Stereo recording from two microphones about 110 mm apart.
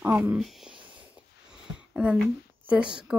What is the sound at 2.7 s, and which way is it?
Speech, 10° right (ahead or behind).